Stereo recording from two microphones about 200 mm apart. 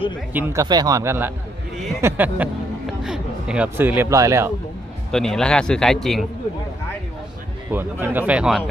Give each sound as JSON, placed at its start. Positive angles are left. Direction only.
{"t": 0.3, "sound": "speech", "side_deg": -15}
{"t": 5.1, "sound": "speech", "side_deg": 5}
{"t": 7.7, "sound": "speech", "side_deg": -10}